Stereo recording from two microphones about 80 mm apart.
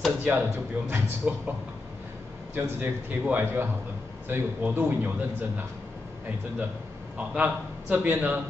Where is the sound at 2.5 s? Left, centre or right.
Right.